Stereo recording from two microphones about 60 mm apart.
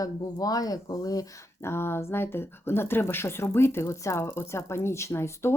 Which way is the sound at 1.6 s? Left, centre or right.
Left.